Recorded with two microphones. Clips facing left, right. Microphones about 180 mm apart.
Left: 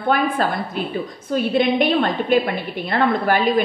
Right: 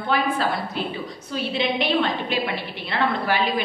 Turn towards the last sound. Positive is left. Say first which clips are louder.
# left 5 dB
turn(degrees=50)  # may be behind; listen again after turning